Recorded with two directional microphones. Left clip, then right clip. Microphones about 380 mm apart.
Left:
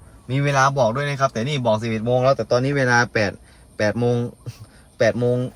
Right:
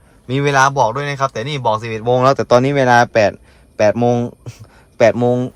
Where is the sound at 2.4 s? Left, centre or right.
Right.